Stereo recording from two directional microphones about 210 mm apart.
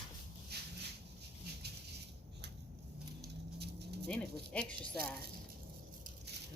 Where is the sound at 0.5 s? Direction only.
50° right (ahead or behind).